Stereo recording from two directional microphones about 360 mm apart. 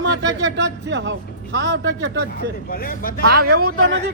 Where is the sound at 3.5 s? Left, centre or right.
Right.